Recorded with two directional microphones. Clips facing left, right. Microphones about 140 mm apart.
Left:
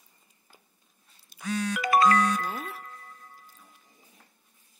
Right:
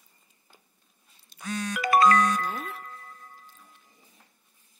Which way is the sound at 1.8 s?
50° right (ahead or behind).